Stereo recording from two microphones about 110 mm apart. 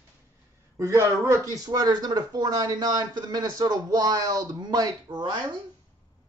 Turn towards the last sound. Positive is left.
turn(degrees=-45)  # may be behind; listen again after turning